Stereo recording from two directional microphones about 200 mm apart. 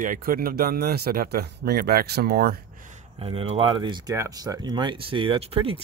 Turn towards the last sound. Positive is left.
turn(degrees=-30)  # may be behind; listen again after turning